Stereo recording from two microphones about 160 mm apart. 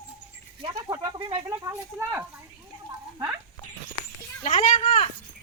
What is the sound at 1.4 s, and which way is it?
Speech, 15° right (ahead or behind).